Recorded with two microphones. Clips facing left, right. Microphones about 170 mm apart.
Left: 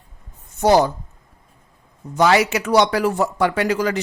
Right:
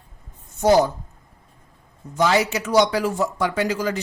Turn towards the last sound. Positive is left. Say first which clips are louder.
# left 3 dB
turn(degrees=70)  # may be behind; listen again after turning